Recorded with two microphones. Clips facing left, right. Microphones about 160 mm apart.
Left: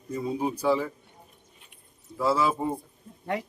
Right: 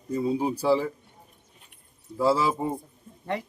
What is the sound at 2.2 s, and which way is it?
Speech, 30° right (ahead or behind).